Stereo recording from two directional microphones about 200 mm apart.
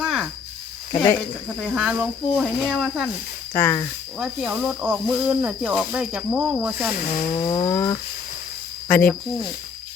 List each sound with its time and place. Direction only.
0.0 s cricket: centre (ahead or behind)
1.6 s speech: 5° right (ahead or behind)
3.5 s speech: 10° left (ahead or behind)
4.2 s speech: 5° right (ahead or behind)
7.1 s a sound: 40° left (ahead or behind)
7.4 s a sound: 25° left (ahead or behind)
7.7 s speech: 15° left (ahead or behind)